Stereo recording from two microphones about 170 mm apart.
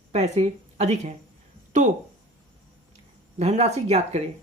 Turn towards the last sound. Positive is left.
turn(degrees=-40)  # may be behind; listen again after turning